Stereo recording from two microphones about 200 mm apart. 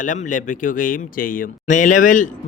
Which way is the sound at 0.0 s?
40° left (ahead or behind).